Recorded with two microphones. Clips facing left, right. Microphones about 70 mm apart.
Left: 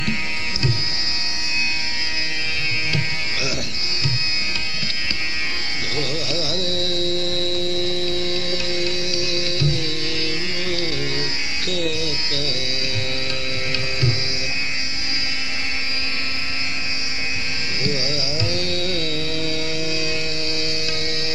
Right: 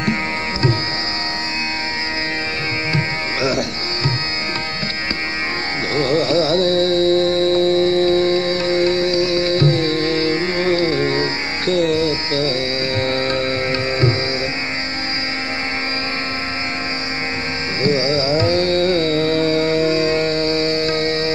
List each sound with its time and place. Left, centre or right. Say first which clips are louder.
0.0 s music: right 6 dB; right
2.9 s music: right 5 dB; right
5.9 s carnatic music: right 11 dB; right
17.8 s carnatic music: right 10 dB; right